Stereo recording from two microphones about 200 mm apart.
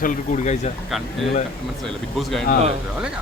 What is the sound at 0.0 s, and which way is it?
Speech, 40° left (ahead or behind).